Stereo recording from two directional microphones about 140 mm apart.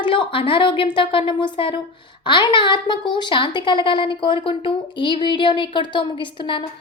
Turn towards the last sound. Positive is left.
turn(degrees=35)  # may be behind; listen again after turning